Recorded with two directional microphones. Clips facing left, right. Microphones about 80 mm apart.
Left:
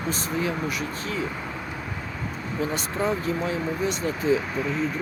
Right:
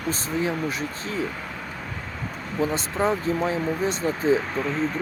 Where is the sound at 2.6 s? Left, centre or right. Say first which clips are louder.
Right 3 dB; right.